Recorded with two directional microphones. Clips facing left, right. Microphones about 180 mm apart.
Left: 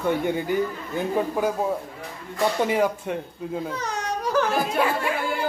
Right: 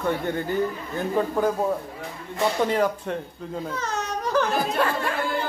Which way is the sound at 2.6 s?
10° left (ahead or behind).